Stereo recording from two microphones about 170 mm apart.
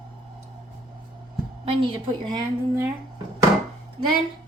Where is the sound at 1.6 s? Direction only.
30° right (ahead or behind).